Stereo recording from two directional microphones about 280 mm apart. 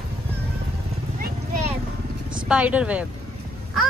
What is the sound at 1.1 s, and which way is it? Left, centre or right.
Vehicle, right.